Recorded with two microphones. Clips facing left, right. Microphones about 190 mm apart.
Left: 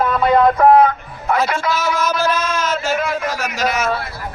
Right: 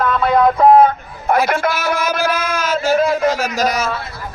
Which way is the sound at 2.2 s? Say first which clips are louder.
Even; 15° right (ahead or behind).